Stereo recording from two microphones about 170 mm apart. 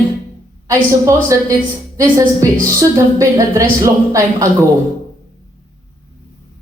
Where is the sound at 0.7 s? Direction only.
15° right (ahead or behind).